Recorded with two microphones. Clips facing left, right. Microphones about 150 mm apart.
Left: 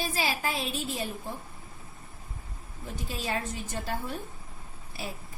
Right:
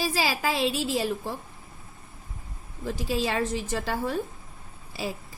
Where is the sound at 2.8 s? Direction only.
90° right.